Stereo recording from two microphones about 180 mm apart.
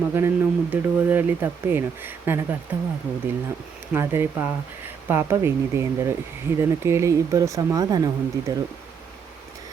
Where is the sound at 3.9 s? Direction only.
15° right (ahead or behind).